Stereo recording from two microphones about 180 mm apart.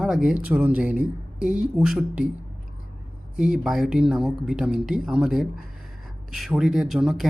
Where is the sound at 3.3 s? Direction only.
5° right (ahead or behind).